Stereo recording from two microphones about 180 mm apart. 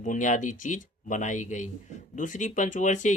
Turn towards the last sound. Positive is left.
turn(degrees=45)  # may be behind; listen again after turning